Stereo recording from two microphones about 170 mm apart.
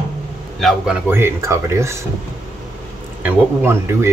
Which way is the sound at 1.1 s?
15° right (ahead or behind).